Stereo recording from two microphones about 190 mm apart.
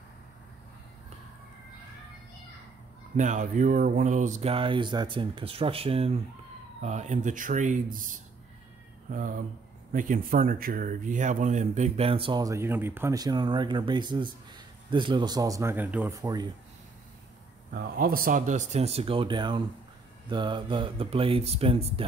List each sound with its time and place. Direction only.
3.2 s speech: 40° right (ahead or behind)
9.9 s speech: 45° right (ahead or behind); by 16.4 s 15° right (ahead or behind)
17.7 s speech: 50° right (ahead or behind); by 22.0 s 30° right (ahead or behind)